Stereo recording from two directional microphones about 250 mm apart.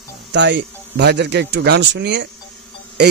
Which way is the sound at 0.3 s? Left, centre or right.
Right.